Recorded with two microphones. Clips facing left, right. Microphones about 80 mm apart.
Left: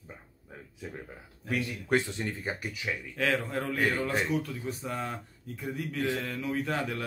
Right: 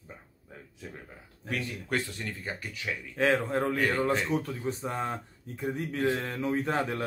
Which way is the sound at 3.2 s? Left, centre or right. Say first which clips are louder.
Right 4 dB; right.